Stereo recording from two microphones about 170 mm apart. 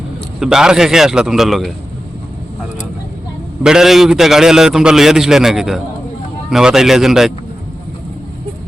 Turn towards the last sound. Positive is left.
turn(degrees=0)  # may be behind; listen again after turning